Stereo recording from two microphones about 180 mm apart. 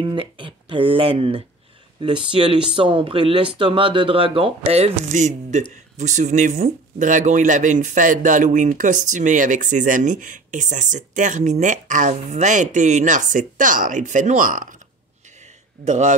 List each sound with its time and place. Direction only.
0.0 s speech: 30° right (ahead or behind); by 14.8 s 45° right (ahead or behind)
15.8 s speech: 40° right (ahead or behind)